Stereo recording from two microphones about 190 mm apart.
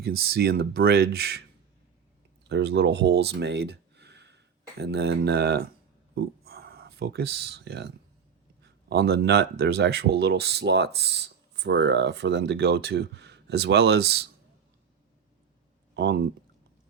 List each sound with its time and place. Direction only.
0.0 s speech: 55° right (ahead or behind)
2.4 s speech: 65° right (ahead or behind)
16.0 s speech: 60° right (ahead or behind)